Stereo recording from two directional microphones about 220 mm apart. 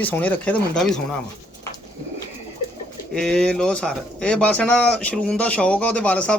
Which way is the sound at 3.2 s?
5° left (ahead or behind).